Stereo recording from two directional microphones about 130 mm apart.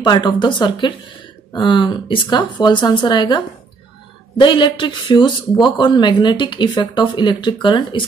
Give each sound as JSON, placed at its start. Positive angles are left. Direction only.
{"t": 0.0, "sound": "speech", "side_deg": 35}